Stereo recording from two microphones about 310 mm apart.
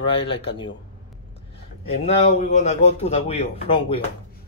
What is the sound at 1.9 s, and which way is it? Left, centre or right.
A man's voice, centre.